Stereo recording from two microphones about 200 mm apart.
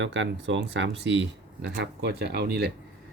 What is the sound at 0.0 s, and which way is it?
Speech, 65° right (ahead or behind).